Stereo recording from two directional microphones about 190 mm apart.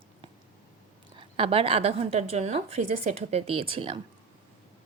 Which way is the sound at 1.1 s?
30° right (ahead or behind).